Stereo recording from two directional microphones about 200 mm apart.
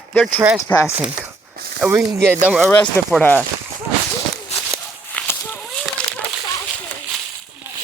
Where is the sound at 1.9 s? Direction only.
15° right (ahead or behind).